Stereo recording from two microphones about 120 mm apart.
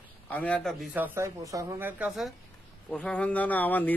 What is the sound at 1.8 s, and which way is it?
Speech, 15° right (ahead or behind).